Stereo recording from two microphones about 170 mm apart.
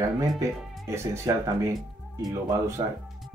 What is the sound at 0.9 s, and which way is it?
Speech, 15° right (ahead or behind).